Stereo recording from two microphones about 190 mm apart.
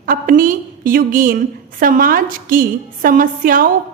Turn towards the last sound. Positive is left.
turn(degrees=-45)  # may be behind; listen again after turning